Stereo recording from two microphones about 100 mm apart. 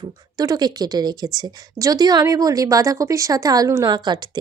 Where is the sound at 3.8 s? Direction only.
45° right (ahead or behind).